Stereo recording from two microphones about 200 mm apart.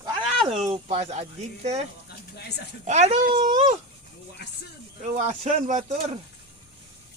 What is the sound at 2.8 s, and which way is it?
Speech, 35° right (ahead or behind).